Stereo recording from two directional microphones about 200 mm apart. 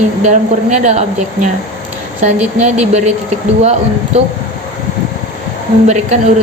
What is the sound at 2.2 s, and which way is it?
Speech, 35° right (ahead or behind).